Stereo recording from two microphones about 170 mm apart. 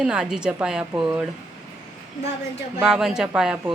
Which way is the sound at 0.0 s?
5° right (ahead or behind).